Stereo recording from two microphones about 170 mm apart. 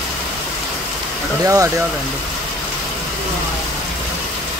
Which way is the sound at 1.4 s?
20° right (ahead or behind).